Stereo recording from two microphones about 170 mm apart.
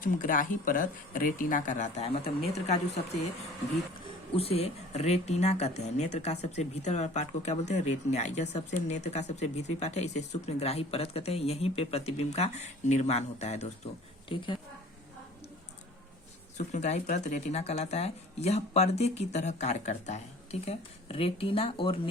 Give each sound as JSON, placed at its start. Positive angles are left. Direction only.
{"t": 0.0, "sound": "speech", "side_deg": 55}
{"t": 4.4, "sound": "speech", "side_deg": 35}
{"t": 14.3, "sound": "speech", "side_deg": 30}
{"t": 16.6, "sound": "speech", "side_deg": 40}